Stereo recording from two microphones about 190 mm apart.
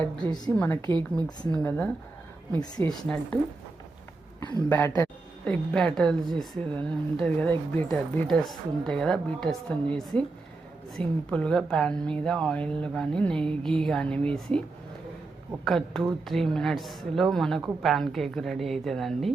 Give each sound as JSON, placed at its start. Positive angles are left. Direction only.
{"t": 0.3, "sound": "a woman's voice", "side_deg": 20}
{"t": 0.5, "sound": "a woman's voice", "side_deg": 10}
{"t": 0.9, "sound": "a woman's voice", "side_deg": -25}
{"t": 1.5, "sound": "a woman's voice", "side_deg": 10}
{"t": 4.7, "sound": "a woman's voice", "side_deg": 15}
{"t": 5.5, "sound": "speech", "side_deg": 5}
{"t": 15.6, "sound": "speech", "side_deg": 0}